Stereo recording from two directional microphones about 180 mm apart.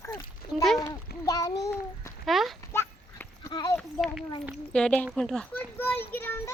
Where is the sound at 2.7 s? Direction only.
15° left (ahead or behind).